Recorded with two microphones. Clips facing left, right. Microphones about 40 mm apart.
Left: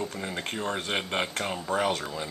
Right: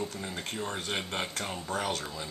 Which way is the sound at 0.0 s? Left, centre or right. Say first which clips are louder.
Left 3 dB; left.